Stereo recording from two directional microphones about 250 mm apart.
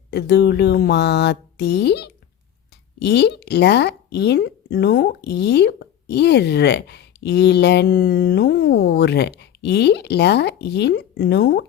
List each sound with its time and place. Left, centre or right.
0.1 s speech: left